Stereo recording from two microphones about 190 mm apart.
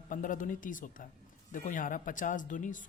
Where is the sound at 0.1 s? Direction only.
45° left (ahead or behind).